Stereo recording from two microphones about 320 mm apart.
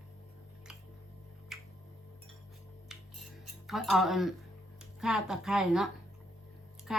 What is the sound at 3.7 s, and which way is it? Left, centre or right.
Speech, centre.